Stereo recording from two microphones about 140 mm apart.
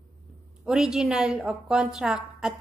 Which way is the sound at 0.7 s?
5° right (ahead or behind).